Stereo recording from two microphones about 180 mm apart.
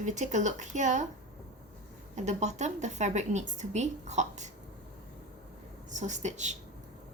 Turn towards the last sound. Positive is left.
turn(degrees=-40)  # may be behind; listen again after turning